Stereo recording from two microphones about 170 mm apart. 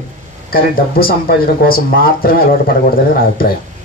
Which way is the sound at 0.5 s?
60° left (ahead or behind).